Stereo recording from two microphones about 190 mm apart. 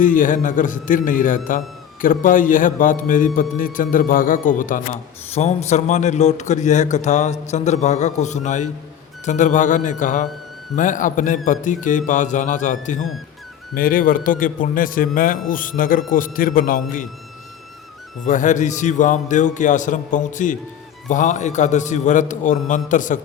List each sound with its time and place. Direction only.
0.0 s a man's voice: 45° left (ahead or behind)
5.3 s a man's voice: 35° left (ahead or behind)
18.3 s a man's voice: 40° left (ahead or behind)